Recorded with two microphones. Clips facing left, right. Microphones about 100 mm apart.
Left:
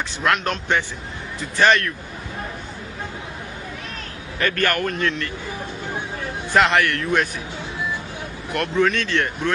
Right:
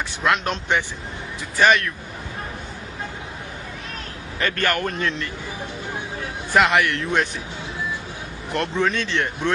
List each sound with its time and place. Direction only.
0.2 s speech: 15° right (ahead or behind)
4.4 s a man's voice: 20° right (ahead or behind)
6.6 s speech: 15° right (ahead or behind)
8.5 s a man's voice: 20° right (ahead or behind)